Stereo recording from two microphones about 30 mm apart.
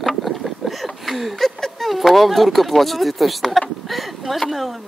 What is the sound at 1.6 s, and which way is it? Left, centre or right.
Speech, centre.